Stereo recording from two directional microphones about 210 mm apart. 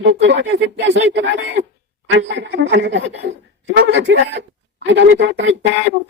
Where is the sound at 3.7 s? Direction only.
55° right (ahead or behind).